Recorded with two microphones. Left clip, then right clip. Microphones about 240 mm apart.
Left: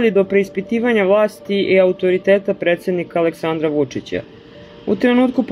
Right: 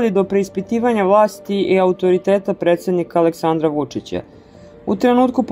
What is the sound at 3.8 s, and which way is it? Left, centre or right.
Speech, right.